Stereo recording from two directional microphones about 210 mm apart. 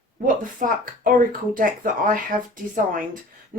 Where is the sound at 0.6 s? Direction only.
40° right (ahead or behind).